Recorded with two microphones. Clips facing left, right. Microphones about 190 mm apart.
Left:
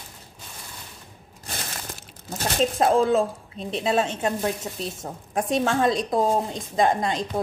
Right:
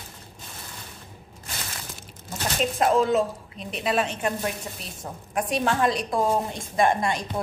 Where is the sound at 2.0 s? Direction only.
35° left (ahead or behind).